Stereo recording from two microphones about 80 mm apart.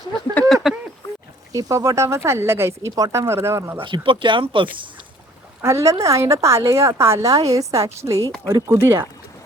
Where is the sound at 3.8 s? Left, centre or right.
Right.